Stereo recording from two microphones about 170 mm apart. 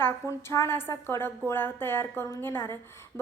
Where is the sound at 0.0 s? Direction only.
15° left (ahead or behind).